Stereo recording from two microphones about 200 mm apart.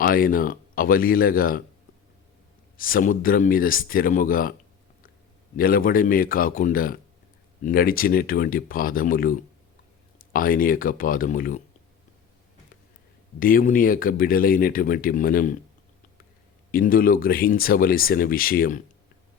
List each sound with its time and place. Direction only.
0.0 s speech: 45° left (ahead or behind)
2.7 s speech: 45° left (ahead or behind)
5.5 s speech: 45° left (ahead or behind)
10.3 s speech: 45° left (ahead or behind)
13.4 s speech: 45° left (ahead or behind)
16.7 s speech: 45° left (ahead or behind)